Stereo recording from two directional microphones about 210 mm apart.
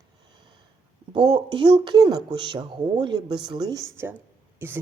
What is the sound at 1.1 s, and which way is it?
Speech, 25° right (ahead or behind).